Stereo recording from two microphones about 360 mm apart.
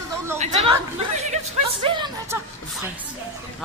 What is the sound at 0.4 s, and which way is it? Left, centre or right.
Speech, centre.